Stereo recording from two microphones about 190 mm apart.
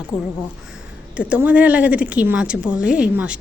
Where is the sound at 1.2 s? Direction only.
5° right (ahead or behind).